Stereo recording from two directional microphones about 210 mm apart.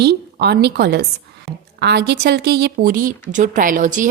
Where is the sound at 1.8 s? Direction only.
55° right (ahead or behind).